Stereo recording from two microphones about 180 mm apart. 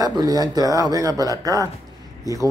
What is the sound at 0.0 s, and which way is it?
Speech, 20° right (ahead or behind).